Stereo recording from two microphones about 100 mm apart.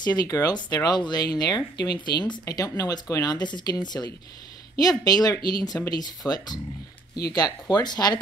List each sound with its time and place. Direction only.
0.0 s speech: 40° left (ahead or behind)